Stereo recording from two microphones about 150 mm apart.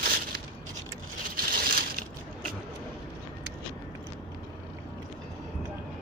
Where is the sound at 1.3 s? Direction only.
75° right (ahead or behind).